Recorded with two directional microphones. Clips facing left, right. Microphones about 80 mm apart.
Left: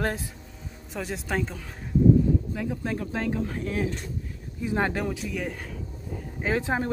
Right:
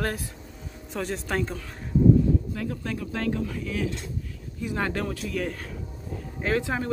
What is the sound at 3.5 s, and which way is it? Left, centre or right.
Speech, left.